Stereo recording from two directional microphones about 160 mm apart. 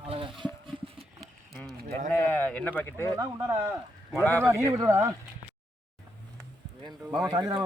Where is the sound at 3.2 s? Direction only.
20° right (ahead or behind).